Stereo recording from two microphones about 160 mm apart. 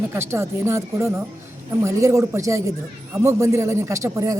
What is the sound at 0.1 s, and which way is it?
Speech, 15° right (ahead or behind).